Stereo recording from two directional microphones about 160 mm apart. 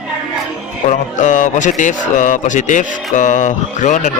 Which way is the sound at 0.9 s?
50° left (ahead or behind).